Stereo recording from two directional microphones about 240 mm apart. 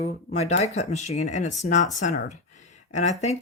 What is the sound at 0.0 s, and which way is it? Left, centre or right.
Speech, left.